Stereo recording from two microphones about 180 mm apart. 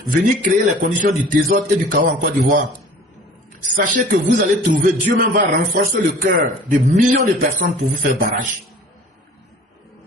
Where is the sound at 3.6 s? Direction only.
45° right (ahead or behind).